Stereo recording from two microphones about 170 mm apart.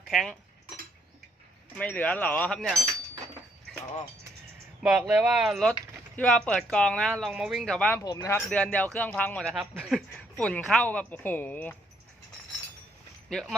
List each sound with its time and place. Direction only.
0.1 s speech: centre (ahead or behind)
1.7 s speech: 10° left (ahead or behind)
4.8 s speech: 5° right (ahead or behind)
8.0 s speech: 20° left (ahead or behind)
8.4 s speech: 5° left (ahead or behind)